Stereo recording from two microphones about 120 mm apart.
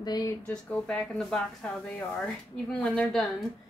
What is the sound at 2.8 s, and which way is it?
Speech, 5° left (ahead or behind).